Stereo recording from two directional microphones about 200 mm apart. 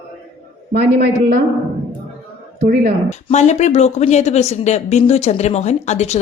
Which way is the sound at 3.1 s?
35° left (ahead or behind).